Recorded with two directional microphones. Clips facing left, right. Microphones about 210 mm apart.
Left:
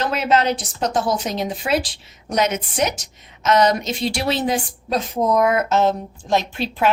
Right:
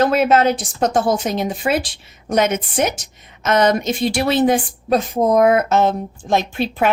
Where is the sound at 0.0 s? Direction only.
50° right (ahead or behind).